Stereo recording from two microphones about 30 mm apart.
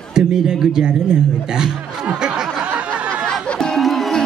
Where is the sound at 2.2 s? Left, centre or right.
Right.